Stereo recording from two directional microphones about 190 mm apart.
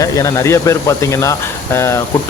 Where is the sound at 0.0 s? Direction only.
15° left (ahead or behind).